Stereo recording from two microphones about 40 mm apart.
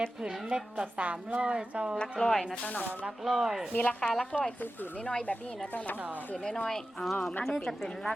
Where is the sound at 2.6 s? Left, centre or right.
Left.